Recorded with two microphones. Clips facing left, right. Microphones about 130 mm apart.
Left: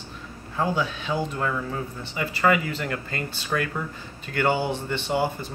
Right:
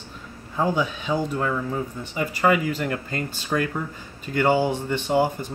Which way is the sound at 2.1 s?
10° right (ahead or behind).